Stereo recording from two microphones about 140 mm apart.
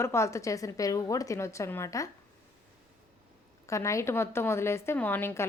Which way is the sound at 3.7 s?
20° left (ahead or behind).